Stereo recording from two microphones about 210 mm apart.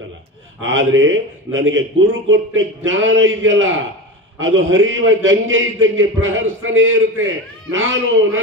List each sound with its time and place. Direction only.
0.6 s a man's voice: 65° right (ahead or behind)